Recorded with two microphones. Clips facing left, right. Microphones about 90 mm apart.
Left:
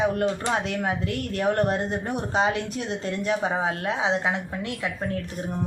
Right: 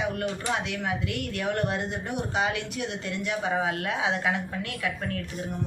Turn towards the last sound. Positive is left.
turn(degrees=25)  # may be behind; listen again after turning